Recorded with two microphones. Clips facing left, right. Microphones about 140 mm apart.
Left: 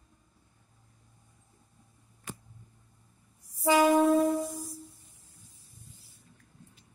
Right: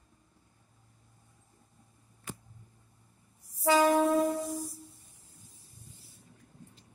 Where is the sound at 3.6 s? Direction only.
15° left (ahead or behind).